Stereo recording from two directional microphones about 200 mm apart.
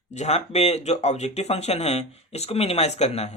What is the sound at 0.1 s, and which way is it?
Speech, 35° left (ahead or behind).